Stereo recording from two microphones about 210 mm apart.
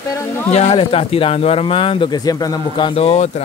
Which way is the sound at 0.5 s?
25° left (ahead or behind).